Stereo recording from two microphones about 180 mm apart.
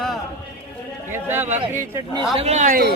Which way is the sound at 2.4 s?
40° right (ahead or behind).